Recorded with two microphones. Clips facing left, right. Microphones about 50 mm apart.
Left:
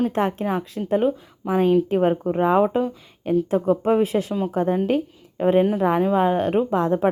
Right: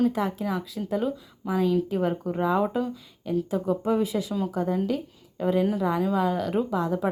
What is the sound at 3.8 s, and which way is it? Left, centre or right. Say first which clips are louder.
A woman's voice: left 6 dB; left.